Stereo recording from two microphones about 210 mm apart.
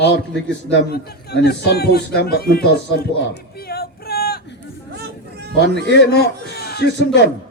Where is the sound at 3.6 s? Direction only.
45° left (ahead or behind).